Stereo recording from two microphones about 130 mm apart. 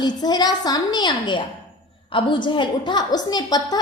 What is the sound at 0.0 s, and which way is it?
A woman's voice, 35° left (ahead or behind).